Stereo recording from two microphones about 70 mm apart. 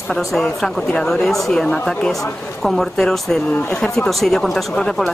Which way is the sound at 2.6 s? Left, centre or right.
Centre.